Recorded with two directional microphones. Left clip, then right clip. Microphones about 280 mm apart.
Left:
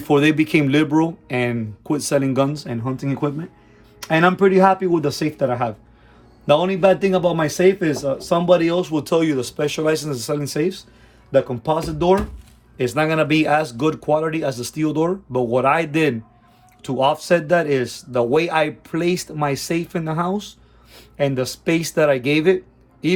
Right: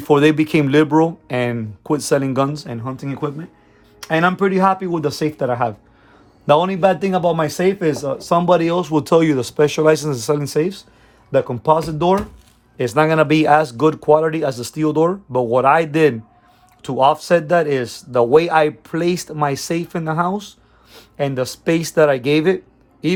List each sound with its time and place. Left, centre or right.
0.0 s speech: centre